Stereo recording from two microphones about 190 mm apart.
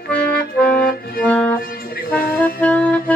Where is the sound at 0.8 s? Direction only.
50° left (ahead or behind).